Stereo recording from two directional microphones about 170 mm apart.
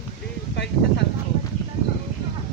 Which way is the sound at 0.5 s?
90° left.